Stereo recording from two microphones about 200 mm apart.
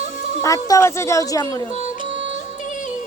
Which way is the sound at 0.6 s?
15° left (ahead or behind).